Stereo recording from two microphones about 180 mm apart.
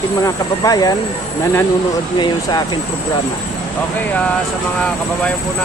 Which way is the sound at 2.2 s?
20° left (ahead or behind).